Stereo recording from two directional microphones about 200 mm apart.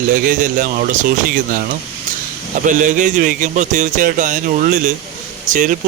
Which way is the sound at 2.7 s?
40° right (ahead or behind).